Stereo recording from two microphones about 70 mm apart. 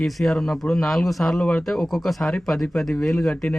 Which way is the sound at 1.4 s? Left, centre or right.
Centre.